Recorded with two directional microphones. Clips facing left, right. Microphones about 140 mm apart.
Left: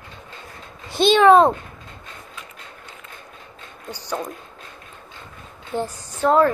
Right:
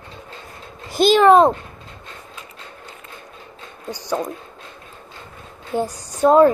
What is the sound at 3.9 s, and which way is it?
Speech, 15° right (ahead or behind).